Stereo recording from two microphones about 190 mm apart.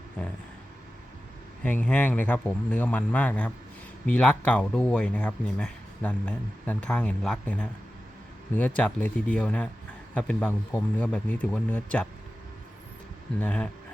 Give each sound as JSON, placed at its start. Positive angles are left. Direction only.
{"t": 1.6, "sound": "speech", "side_deg": 10}
{"t": 13.4, "sound": "speech", "side_deg": 10}